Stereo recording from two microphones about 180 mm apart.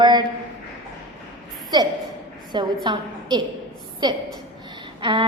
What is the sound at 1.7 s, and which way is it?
A woman's voice, 25° right (ahead or behind).